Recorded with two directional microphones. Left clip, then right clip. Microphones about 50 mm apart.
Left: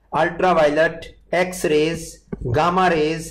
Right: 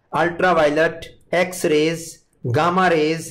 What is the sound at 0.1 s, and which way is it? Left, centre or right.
Speech, right.